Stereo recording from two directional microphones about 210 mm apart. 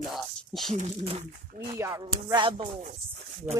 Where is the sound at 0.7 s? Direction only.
30° right (ahead or behind).